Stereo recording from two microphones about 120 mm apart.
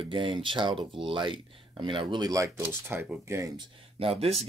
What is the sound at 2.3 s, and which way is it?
Speech, 25° right (ahead or behind).